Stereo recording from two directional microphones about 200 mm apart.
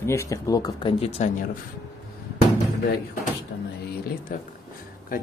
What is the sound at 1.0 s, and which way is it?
Speech, 35° left (ahead or behind).